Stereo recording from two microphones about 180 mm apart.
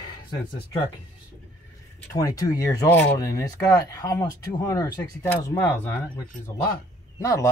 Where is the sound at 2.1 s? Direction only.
20° left (ahead or behind).